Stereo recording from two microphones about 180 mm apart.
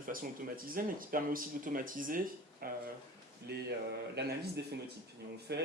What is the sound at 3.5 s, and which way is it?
Speech, 65° right (ahead or behind).